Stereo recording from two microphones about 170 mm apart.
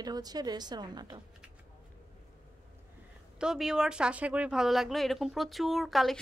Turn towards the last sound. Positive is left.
turn(degrees=0)  # may be behind; listen again after turning